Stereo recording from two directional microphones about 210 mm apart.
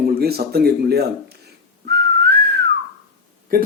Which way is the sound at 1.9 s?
50° right (ahead or behind).